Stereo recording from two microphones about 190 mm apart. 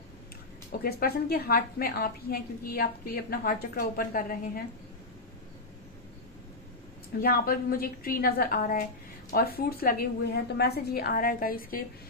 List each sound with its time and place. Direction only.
0.8 s a woman's voice: 55° left (ahead or behind)
7.2 s a woman's voice: 50° left (ahead or behind)